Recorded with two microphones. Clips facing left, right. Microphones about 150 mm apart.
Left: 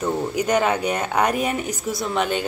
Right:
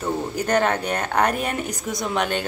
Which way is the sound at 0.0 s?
10° left (ahead or behind).